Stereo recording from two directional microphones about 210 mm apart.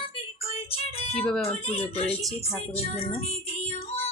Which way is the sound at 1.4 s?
25° left (ahead or behind).